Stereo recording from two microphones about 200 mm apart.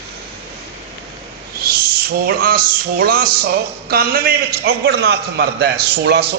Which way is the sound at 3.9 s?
50° right (ahead or behind).